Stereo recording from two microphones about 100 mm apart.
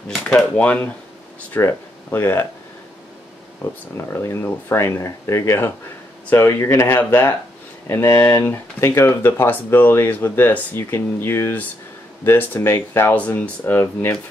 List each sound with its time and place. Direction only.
0.1 s speech: centre (ahead or behind)
0.6 s speech: 15° left (ahead or behind)
1.7 s speech: 25° left (ahead or behind)
3.9 s speech: 25° left (ahead or behind)